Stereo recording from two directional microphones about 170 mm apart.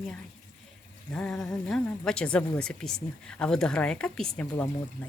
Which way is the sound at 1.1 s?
5° left (ahead or behind).